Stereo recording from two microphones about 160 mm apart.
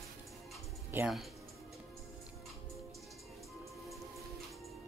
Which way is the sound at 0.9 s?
10° right (ahead or behind).